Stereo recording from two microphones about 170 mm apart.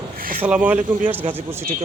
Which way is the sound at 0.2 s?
55° right (ahead or behind).